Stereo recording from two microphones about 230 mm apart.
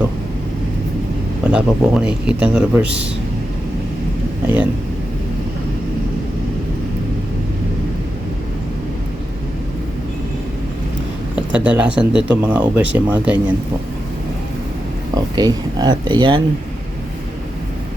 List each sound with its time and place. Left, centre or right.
1.5 s speech: centre
4.4 s speech: centre
11.3 s speech: centre
15.1 s speech: centre